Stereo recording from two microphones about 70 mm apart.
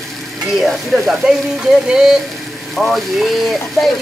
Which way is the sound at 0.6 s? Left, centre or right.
Centre.